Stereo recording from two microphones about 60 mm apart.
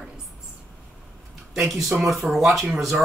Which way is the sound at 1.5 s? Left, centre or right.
Centre.